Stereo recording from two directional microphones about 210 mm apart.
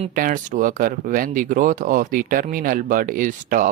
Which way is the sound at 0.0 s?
40° right (ahead or behind).